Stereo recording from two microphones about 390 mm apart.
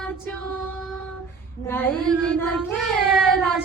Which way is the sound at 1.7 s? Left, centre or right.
Centre.